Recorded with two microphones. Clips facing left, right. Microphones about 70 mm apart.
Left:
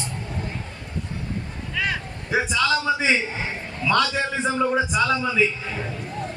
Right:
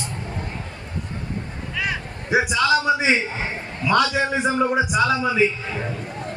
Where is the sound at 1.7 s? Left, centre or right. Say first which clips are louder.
Even; centre.